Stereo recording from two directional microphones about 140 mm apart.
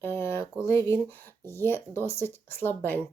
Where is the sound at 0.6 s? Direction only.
20° left (ahead or behind).